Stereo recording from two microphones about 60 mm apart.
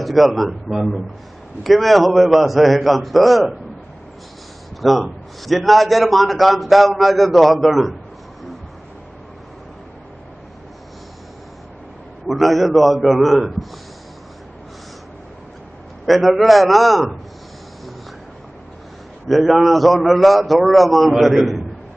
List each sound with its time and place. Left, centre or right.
0.0 s a man's voice: centre
4.8 s a man's voice: centre
12.3 s a man's voice: centre
16.1 s a man's voice: centre
19.2 s a man's voice: centre